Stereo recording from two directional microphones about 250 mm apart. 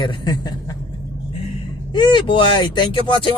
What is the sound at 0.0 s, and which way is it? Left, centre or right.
Speech, centre.